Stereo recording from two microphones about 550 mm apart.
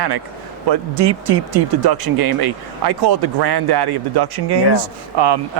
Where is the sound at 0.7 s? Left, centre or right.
Right.